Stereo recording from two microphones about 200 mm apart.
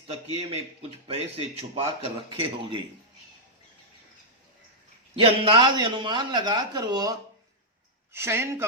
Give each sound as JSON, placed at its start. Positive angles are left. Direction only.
{"t": 0.1, "sound": "speech", "side_deg": -30}
{"t": 5.1, "sound": "speech", "side_deg": -25}